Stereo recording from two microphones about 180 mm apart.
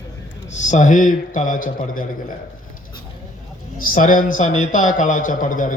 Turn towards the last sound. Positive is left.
turn(degrees=45)  # may be behind; listen again after turning